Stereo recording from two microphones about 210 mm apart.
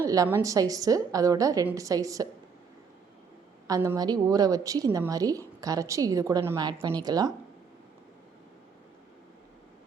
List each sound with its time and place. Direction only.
0.0 s a woman's voice: 15° right (ahead or behind)
3.7 s a woman's voice: 15° right (ahead or behind)